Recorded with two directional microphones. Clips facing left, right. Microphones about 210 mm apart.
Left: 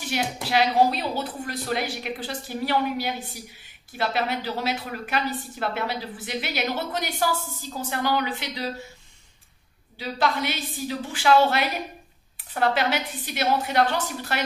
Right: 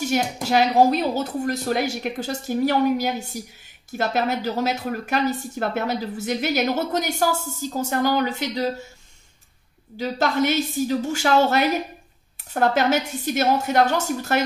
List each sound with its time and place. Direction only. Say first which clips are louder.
0.0 s a woman's voice: right 5 dB; 45° right (ahead or behind)
9.9 s a woman's voice: right 4 dB; 45° right (ahead or behind)